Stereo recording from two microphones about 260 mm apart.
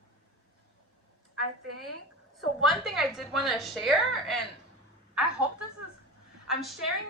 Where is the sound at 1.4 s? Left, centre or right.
Right.